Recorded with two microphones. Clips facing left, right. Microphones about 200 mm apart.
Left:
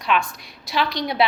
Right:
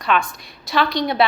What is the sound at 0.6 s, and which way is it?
Speech, 55° right (ahead or behind).